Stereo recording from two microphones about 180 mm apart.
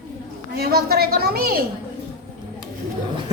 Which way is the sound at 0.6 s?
60° right (ahead or behind).